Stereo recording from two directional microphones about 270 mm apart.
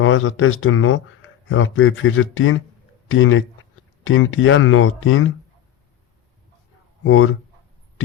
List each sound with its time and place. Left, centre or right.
0.0 s speech: left
7.0 s speech: left